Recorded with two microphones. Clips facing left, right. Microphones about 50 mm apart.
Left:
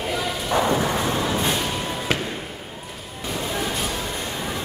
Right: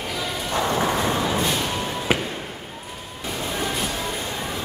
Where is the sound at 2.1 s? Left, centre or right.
Centre.